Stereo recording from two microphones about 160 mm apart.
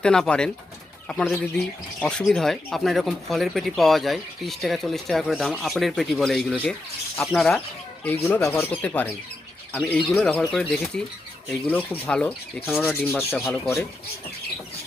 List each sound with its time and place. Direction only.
0.0 s speech: 5° left (ahead or behind)
8.3 s speech: 15° left (ahead or behind)